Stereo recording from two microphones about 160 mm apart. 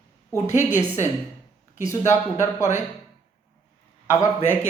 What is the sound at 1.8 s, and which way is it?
Speech, 15° left (ahead or behind).